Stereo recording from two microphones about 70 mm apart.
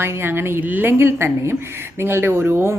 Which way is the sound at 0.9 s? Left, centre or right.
Right.